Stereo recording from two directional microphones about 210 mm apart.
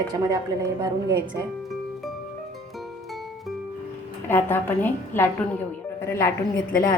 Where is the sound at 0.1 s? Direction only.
15° right (ahead or behind).